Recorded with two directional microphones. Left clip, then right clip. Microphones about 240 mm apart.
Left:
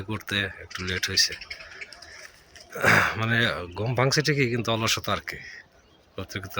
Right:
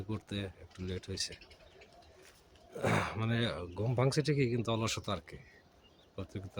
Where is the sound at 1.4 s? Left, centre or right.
Centre.